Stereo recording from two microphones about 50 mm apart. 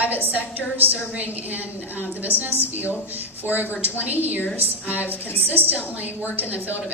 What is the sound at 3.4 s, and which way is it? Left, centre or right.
Speech, right.